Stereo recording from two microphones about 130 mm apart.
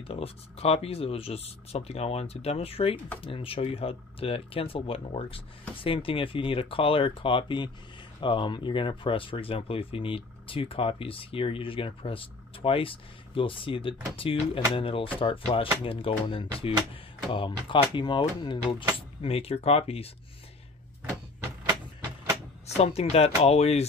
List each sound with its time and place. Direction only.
0.0 s speech: 50° left (ahead or behind)
18.9 s speech: 50° left (ahead or behind)
22.8 s speech: 50° left (ahead or behind)